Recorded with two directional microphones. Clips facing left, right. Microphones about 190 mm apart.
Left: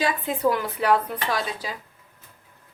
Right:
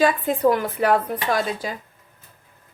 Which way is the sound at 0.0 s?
50° right (ahead or behind).